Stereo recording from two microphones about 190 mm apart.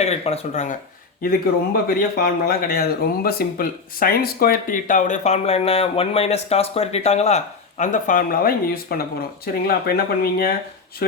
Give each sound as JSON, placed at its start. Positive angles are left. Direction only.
{"t": 0.0, "sound": "speech", "side_deg": 35}
{"t": 1.9, "sound": "speech", "side_deg": 50}